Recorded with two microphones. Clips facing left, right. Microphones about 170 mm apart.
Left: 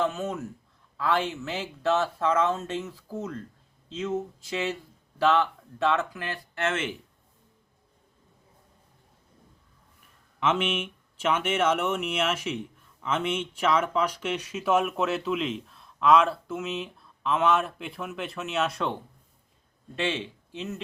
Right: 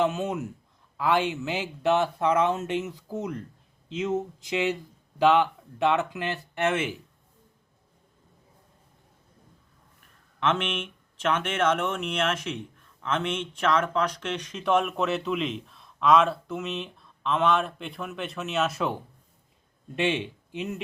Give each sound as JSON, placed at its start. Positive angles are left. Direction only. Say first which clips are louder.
{"t": 0.0, "sound": "speech", "louder": "right 2 dB", "side_deg": -20}
{"t": 10.4, "sound": "speech", "louder": "left 1 dB", "side_deg": 5}
{"t": 20.0, "sound": "speech", "louder": "right 3 dB", "side_deg": -15}